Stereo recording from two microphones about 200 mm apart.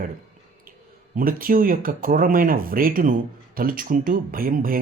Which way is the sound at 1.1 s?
45° right (ahead or behind).